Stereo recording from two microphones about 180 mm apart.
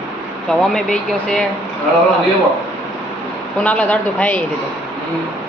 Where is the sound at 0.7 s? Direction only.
5° left (ahead or behind).